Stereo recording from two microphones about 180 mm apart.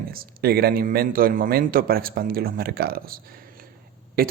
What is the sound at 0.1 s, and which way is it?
A man's voice, 55° right (ahead or behind).